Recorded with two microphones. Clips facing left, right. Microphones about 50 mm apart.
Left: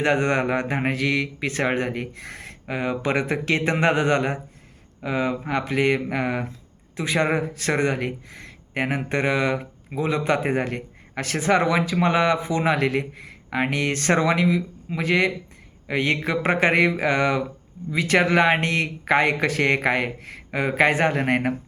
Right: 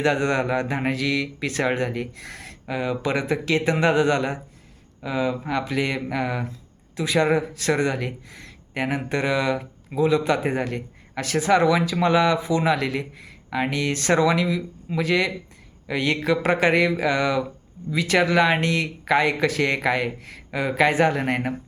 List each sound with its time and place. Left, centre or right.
0.0 s speech: left